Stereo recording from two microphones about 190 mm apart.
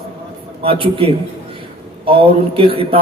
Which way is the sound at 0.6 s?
30° right (ahead or behind).